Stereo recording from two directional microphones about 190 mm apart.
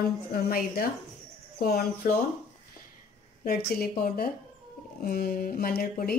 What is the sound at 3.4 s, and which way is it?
Speech, 50° left (ahead or behind).